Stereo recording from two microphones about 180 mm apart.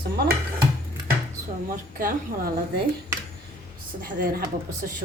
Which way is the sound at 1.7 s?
50° right (ahead or behind).